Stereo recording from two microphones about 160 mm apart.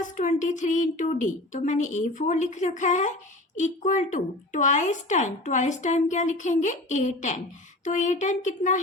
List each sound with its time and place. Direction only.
0.0 s speech: 50° left (ahead or behind)